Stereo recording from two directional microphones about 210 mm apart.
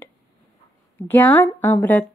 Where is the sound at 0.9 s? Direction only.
10° left (ahead or behind).